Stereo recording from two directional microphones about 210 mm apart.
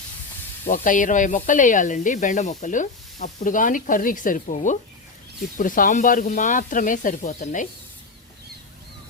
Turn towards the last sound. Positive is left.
turn(degrees=35)  # may be behind; listen again after turning